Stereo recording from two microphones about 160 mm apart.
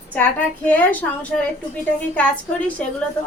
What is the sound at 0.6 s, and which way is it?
Speech, 10° left (ahead or behind).